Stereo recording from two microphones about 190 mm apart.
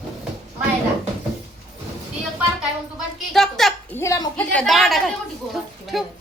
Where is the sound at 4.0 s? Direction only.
20° left (ahead or behind).